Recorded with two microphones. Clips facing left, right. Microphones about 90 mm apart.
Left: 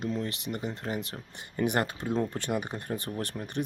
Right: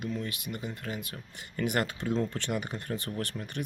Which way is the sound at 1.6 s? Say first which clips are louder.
Left 2 dB; 20° left (ahead or behind).